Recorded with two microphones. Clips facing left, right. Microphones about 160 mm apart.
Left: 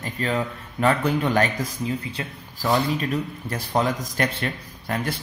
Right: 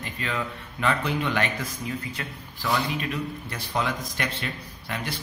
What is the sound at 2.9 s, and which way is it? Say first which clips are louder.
Speech: left 4 dB; 40° left (ahead or behind).